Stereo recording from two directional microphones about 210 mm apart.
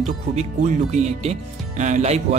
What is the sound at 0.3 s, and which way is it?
Speech, 35° right (ahead or behind).